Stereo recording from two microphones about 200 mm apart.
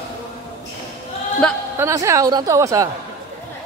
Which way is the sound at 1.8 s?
15° right (ahead or behind).